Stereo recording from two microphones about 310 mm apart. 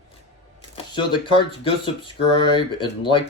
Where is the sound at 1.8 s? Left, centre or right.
Centre.